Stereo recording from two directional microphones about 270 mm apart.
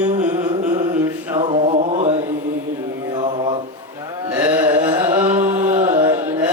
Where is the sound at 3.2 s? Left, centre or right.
Centre.